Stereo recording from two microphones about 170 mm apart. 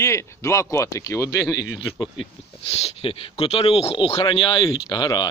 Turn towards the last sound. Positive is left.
turn(degrees=25)  # may be behind; listen again after turning